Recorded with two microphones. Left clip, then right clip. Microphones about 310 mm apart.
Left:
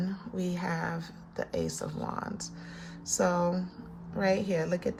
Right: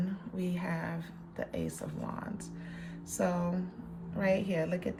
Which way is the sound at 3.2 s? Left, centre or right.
Centre.